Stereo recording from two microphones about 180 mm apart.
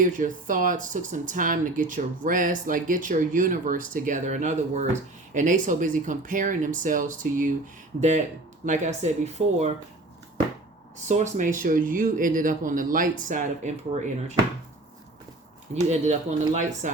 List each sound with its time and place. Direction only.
0.0 s speech: 45° right (ahead or behind)
8.6 s speech: 40° right (ahead or behind)
11.1 s speech: 40° right (ahead or behind)
15.7 s speech: 40° right (ahead or behind)